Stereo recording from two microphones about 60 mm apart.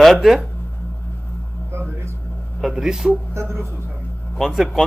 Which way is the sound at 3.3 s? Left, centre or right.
Right.